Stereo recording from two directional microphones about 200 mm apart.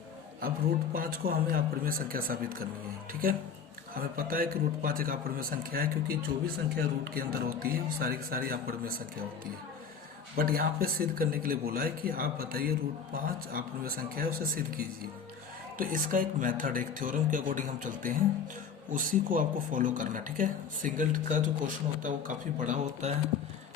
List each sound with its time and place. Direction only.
0.9 s a man's voice: 45° right (ahead or behind)
10.3 s a man's voice: 50° right (ahead or behind)
15.8 s a man's voice: 45° right (ahead or behind)